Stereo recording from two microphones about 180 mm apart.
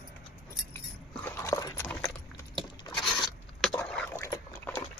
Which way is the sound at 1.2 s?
15° left (ahead or behind).